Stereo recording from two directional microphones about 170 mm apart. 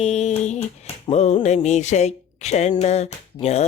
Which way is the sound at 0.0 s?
40° left (ahead or behind).